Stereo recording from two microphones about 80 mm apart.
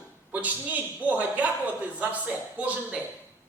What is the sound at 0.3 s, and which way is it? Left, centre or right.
A man's voice, centre.